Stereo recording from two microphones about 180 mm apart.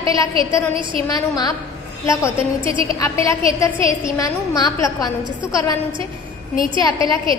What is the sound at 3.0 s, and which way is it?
A woman's voice, 15° left (ahead or behind).